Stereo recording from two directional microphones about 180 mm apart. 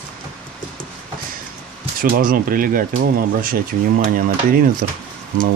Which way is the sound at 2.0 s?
50° right (ahead or behind).